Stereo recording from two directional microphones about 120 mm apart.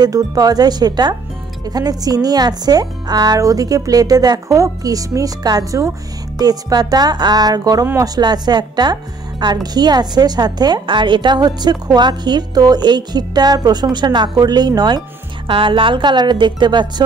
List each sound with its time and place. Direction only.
0.0 s a woman's voice: 30° right (ahead or behind)